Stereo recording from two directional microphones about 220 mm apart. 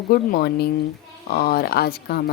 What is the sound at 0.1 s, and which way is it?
Speech, 45° left (ahead or behind).